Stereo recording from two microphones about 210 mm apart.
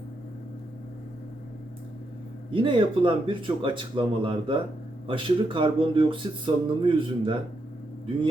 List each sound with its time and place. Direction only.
2.5 s speech: 25° right (ahead or behind)